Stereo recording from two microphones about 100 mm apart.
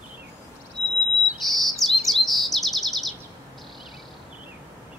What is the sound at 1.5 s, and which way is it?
Chirp, centre (ahead or behind).